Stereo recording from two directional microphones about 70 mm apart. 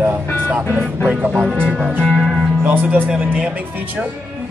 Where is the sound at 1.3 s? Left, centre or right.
Centre.